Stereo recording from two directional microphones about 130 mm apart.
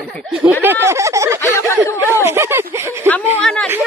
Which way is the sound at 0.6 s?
15° right (ahead or behind).